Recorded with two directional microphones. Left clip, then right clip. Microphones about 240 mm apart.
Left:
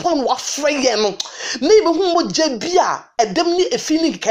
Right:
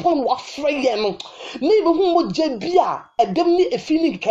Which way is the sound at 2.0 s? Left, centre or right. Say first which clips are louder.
Left 2 dB; centre.